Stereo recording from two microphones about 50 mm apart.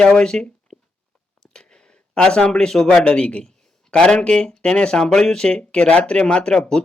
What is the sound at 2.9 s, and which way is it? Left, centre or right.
Speech, centre.